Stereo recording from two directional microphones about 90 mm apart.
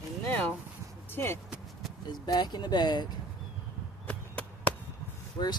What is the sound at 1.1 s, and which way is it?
Speech, 25° left (ahead or behind).